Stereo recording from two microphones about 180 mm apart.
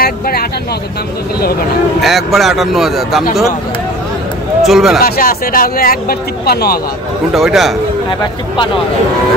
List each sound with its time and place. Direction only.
0.0 s speech: 60° left (ahead or behind)
2.0 s a man's voice: centre (ahead or behind)
4.6 s a man's voice: centre (ahead or behind)
5.0 s speech: 55° left (ahead or behind)
7.3 s a man's voice: centre (ahead or behind)